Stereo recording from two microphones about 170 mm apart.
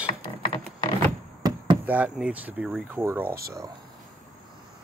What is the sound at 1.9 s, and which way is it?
Speech, 5° right (ahead or behind).